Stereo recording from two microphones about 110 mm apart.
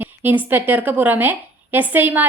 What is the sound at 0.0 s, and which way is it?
Speech, 20° right (ahead or behind).